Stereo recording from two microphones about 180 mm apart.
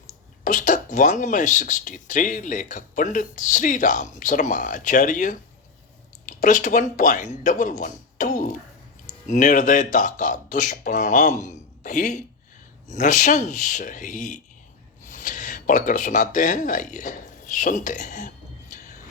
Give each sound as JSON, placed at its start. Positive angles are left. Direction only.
{"t": 0.4, "sound": "speech", "side_deg": 45}